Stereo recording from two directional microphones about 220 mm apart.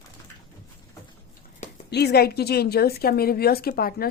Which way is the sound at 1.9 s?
50° left (ahead or behind).